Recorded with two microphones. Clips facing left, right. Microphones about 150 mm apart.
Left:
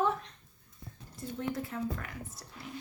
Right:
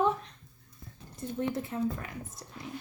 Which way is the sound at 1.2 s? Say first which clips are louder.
Right 3 dB; 25° right (ahead or behind).